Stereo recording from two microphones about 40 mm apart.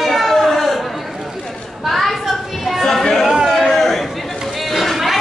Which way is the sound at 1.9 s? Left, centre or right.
Centre.